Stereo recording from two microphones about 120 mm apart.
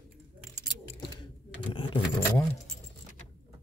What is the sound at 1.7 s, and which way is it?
Sewing machine, 45° left (ahead or behind).